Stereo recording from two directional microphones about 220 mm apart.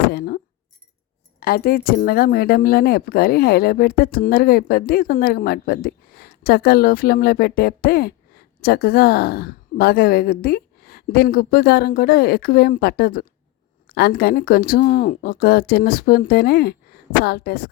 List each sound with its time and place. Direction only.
0.1 s speech: 45° left (ahead or behind)
1.4 s speech: 40° left (ahead or behind)